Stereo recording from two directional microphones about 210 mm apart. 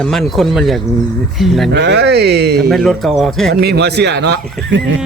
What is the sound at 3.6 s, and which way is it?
Speech, 50° right (ahead or behind).